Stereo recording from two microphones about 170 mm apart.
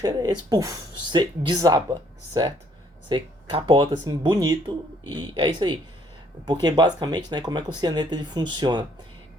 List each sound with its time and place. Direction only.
0.0 s speech: 20° right (ahead or behind)